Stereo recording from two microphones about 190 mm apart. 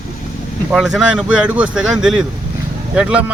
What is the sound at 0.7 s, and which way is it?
Speech, 5° right (ahead or behind).